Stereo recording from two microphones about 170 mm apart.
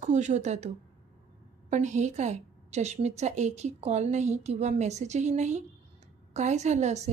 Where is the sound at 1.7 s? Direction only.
45° right (ahead or behind).